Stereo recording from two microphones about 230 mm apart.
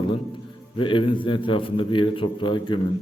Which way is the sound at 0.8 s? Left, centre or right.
Left.